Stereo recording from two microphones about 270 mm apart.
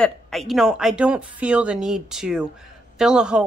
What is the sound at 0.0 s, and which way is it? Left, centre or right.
A woman's voice, centre.